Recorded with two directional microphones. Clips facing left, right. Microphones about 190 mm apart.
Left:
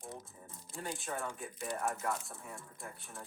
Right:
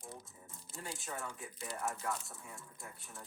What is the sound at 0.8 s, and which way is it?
Speech, 55° left (ahead or behind).